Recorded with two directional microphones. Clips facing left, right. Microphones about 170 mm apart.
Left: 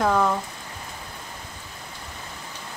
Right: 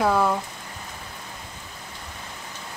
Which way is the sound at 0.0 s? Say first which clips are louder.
Even; 5° right (ahead or behind).